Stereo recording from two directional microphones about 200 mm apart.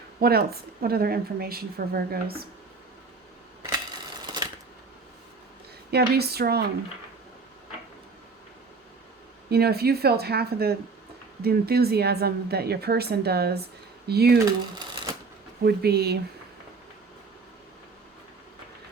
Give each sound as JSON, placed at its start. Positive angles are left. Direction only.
{"t": 0.2, "sound": "a woman's voice", "side_deg": -50}
{"t": 4.3, "sound": "shuffling cards", "side_deg": -20}
{"t": 5.9, "sound": "a woman's voice", "side_deg": -55}
{"t": 9.5, "sound": "a woman's voice", "side_deg": -50}
{"t": 15.6, "sound": "a woman's voice", "side_deg": -50}